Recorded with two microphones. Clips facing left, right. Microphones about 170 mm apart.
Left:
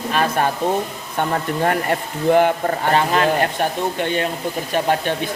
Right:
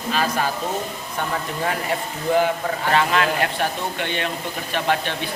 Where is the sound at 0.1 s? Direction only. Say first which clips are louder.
Left 3 dB; 55° left (ahead or behind).